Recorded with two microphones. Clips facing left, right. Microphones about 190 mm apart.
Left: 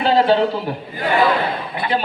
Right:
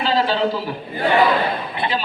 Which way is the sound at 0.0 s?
60° left (ahead or behind).